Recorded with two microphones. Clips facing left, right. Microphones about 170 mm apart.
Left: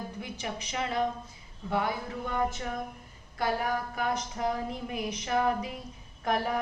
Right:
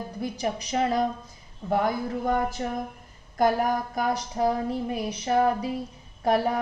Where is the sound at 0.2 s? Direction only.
35° right (ahead or behind).